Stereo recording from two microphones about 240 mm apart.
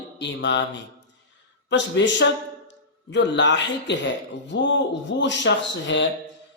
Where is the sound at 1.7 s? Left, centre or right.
Left.